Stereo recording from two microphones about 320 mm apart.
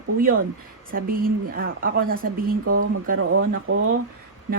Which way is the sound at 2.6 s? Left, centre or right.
Right.